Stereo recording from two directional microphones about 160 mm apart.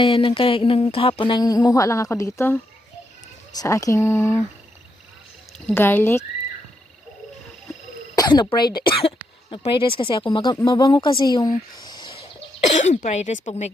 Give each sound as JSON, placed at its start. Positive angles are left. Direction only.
{"t": 0.0, "sound": "speech", "side_deg": 30}
{"t": 3.6, "sound": "speech", "side_deg": 20}
{"t": 5.5, "sound": "speech", "side_deg": 10}
{"t": 8.1, "sound": "speech", "side_deg": 25}
{"t": 12.5, "sound": "speech", "side_deg": 50}